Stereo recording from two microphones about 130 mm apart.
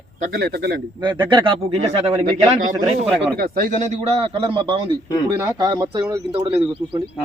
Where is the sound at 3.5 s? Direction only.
85° right.